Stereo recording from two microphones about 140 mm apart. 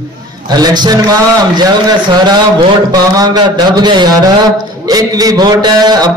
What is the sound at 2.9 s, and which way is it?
Speech, 30° right (ahead or behind).